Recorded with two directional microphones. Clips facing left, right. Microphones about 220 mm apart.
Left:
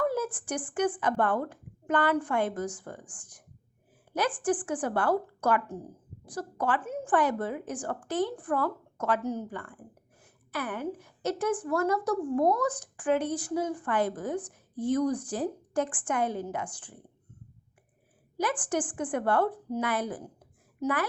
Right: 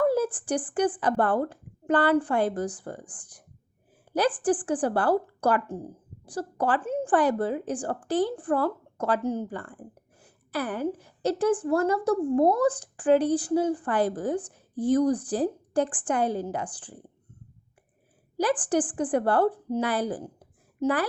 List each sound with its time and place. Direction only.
0.0 s a woman's voice: 30° right (ahead or behind)
18.3 s a woman's voice: 35° right (ahead or behind)